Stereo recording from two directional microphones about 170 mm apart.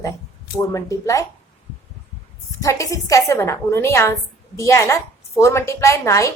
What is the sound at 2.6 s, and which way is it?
A woman's voice, 20° left (ahead or behind).